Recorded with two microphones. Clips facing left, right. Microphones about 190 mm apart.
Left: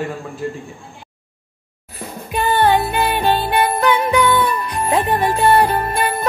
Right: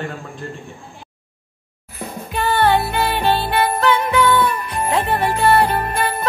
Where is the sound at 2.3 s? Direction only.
15° left (ahead or behind).